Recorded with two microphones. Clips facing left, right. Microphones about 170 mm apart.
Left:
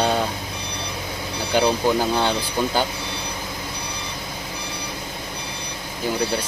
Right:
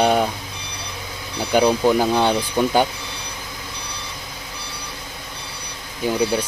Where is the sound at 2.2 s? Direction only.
15° right (ahead or behind).